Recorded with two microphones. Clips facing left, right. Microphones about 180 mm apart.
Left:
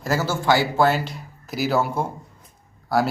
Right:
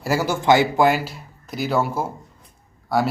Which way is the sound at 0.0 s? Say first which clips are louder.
Right 2 dB; 10° right (ahead or behind).